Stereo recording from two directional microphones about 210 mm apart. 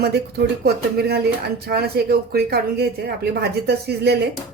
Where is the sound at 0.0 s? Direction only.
50° right (ahead or behind).